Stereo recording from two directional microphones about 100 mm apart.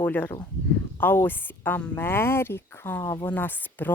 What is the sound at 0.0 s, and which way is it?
Speech, 15° left (ahead or behind).